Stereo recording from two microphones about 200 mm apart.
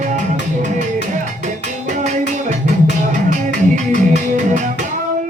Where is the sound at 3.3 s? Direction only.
40° right (ahead or behind).